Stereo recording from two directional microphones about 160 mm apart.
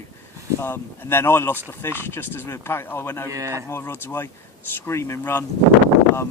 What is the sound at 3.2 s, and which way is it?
Speech, 20° right (ahead or behind).